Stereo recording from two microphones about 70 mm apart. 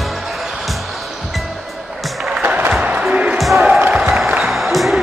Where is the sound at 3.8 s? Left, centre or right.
Centre.